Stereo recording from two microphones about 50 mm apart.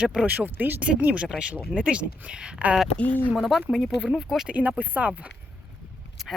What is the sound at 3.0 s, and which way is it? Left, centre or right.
Speech, left.